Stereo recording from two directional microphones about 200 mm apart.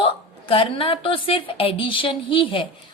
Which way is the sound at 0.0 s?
25° left (ahead or behind).